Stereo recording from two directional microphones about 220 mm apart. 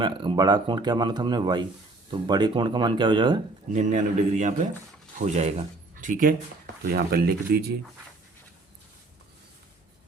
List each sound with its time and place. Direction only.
0.0 s speech: 20° right (ahead or behind)
3.7 s a man's voice: 35° right (ahead or behind)